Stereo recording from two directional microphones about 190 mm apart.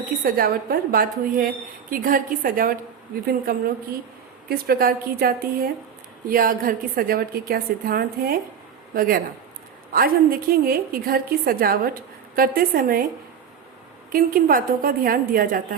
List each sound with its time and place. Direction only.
0.3 s a woman's voice: 50° right (ahead or behind)
14.1 s a woman's voice: 50° right (ahead or behind)